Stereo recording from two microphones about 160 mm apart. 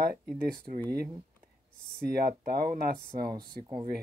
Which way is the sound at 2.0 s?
75° right (ahead or behind).